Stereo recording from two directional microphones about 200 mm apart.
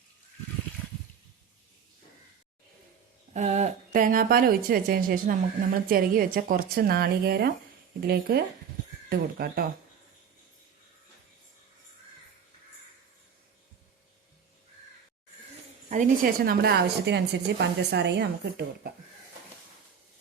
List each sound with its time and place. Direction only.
3.3 s a woman's voice: 35° right (ahead or behind)
15.9 s a woman's voice: 45° right (ahead or behind)